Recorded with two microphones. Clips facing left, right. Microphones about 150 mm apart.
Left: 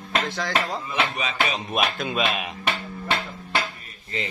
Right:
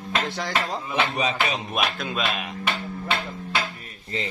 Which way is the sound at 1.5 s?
Centre (ahead or behind).